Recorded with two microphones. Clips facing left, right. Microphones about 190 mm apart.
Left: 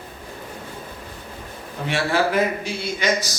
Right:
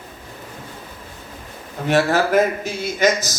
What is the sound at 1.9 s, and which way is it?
A man's voice, 45° right (ahead or behind).